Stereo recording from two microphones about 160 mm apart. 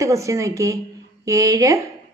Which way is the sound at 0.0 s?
20° right (ahead or behind).